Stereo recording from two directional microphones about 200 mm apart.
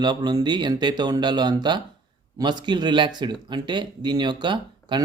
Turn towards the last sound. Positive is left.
turn(degrees=-25)  # may be behind; listen again after turning